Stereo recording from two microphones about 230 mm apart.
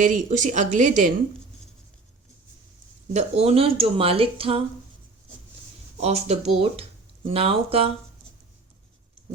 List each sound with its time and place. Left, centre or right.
0.0 s speech: right
3.1 s speech: right
6.0 s speech: right